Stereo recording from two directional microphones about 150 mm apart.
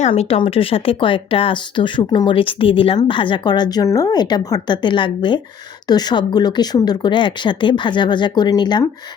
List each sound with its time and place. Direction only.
0.1 s speech: 35° left (ahead or behind)